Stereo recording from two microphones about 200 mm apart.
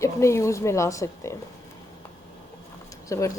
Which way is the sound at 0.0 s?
15° left (ahead or behind).